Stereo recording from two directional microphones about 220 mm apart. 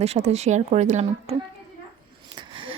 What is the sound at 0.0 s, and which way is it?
A woman's voice, 30° right (ahead or behind).